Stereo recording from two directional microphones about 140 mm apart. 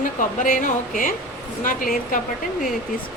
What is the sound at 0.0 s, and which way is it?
Speech, 70° left (ahead or behind).